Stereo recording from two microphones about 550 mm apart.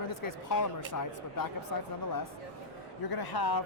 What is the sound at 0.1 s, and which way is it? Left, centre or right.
Speech, left.